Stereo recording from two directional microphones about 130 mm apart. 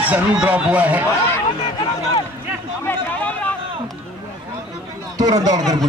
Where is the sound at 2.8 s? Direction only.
10° left (ahead or behind).